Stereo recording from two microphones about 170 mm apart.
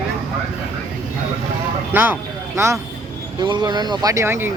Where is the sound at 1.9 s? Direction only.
10° right (ahead or behind).